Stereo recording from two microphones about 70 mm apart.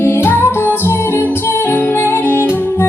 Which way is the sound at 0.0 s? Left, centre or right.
Left.